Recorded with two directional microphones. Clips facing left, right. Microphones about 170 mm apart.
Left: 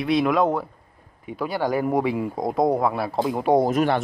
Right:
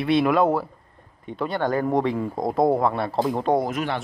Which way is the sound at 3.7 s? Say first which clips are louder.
Left 6 dB; 45° left (ahead or behind).